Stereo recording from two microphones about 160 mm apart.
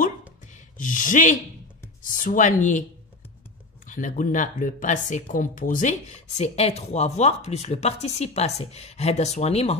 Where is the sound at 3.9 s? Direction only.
55° left (ahead or behind).